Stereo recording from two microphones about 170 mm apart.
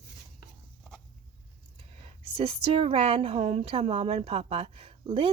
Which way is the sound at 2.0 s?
35° right (ahead or behind).